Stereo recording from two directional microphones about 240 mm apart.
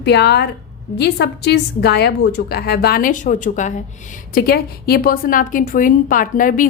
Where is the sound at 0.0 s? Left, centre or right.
Left.